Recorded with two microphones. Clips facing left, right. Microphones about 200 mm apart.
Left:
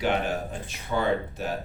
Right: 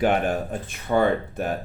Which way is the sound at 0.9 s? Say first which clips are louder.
Right 5 dB; 65° right (ahead or behind).